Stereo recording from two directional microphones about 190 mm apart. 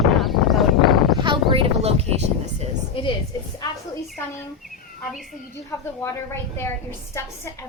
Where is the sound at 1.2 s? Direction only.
25° right (ahead or behind).